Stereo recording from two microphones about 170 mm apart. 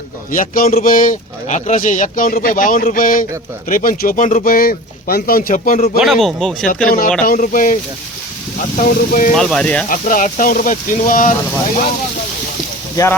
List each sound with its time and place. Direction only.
0.3 s speech: 55° left (ahead or behind)
6.0 s speech: centre (ahead or behind)
6.8 s speech: 55° left (ahead or behind)
9.3 s speech: centre (ahead or behind)
9.9 s speech: 50° left (ahead or behind)